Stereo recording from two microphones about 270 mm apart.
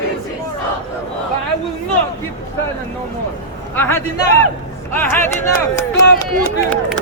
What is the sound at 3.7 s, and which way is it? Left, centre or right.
Speech, centre.